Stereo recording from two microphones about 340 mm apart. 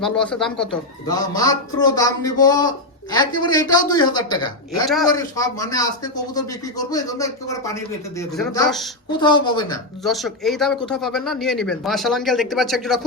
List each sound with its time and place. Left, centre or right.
0.0 s speech: centre
9.2 s speech: centre
10.0 s speech: centre